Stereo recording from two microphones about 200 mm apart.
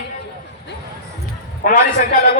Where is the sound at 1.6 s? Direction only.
40° left (ahead or behind).